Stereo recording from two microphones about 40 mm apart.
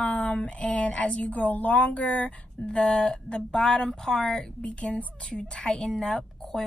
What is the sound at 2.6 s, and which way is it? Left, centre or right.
A woman's voice, centre.